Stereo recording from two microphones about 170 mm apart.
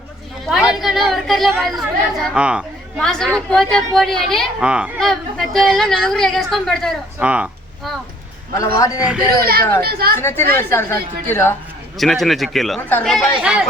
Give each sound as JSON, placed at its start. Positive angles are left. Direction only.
{"t": 0.7, "sound": "a woman's voice", "side_deg": 0}
{"t": 8.5, "sound": "a man's voice", "side_deg": 20}
{"t": 9.4, "sound": "a woman's voice", "side_deg": -65}
{"t": 10.2, "sound": "a woman's voice", "side_deg": 15}
{"t": 11.9, "sound": "a woman's voice", "side_deg": 0}